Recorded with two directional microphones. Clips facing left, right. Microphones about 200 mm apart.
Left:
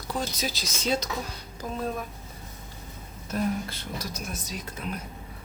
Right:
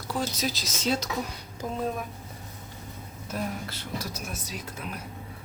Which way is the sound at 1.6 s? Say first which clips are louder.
Right 1 dB; 20° right (ahead or behind).